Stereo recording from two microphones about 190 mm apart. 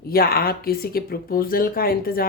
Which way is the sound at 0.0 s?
50° left (ahead or behind).